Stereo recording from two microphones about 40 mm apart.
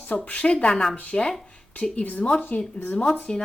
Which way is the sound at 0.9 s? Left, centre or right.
Left.